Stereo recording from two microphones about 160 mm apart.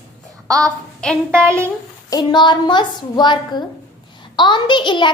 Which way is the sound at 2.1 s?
25° left (ahead or behind).